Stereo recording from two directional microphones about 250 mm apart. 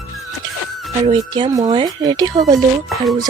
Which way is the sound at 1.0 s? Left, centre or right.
Centre.